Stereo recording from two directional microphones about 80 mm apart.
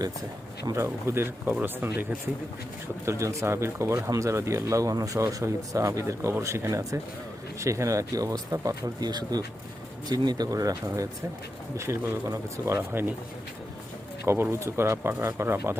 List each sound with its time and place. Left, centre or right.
0.6 s speech: right
1.0 s speech: right
3.1 s speech: right
11.8 s speech: right
14.3 s speech: right